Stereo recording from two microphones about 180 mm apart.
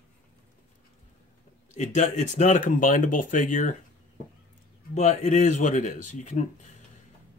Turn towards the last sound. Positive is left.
turn(degrees=40)  # may be behind; listen again after turning